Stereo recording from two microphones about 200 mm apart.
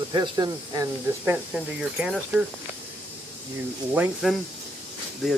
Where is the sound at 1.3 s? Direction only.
5° right (ahead or behind).